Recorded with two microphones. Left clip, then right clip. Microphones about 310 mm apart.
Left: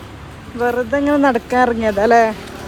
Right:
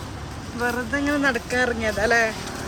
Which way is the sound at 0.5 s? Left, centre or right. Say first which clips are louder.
Left 8 dB; centre.